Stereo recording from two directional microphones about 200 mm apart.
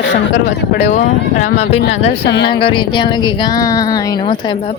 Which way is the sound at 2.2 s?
55° left (ahead or behind).